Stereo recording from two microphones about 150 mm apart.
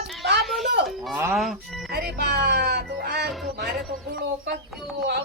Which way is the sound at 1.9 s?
90° right.